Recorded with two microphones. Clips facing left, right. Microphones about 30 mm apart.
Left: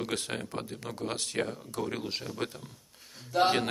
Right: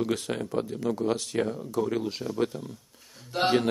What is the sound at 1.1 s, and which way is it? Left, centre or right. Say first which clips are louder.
Speech: right 5 dB; left.